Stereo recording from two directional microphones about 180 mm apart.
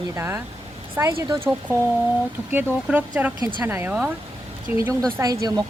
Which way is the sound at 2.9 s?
10° right (ahead or behind).